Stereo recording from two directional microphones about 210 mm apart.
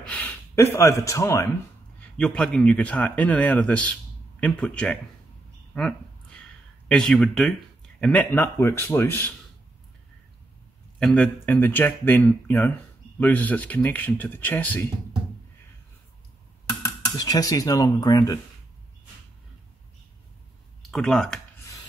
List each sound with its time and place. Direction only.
0.0 s speech: 10° left (ahead or behind)
5.8 s a sound: 5° left (ahead or behind)
6.9 s speech: 5° left (ahead or behind)
11.0 s speech: 5° left (ahead or behind)
17.2 s speech: 15° left (ahead or behind)
20.9 s speech: centre (ahead or behind)